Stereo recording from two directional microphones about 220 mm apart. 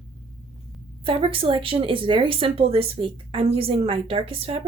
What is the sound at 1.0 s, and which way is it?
Speech, 25° right (ahead or behind).